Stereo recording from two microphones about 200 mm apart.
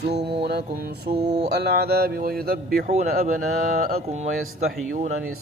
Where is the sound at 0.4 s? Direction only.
55° right (ahead or behind); by 4.4 s 35° right (ahead or behind).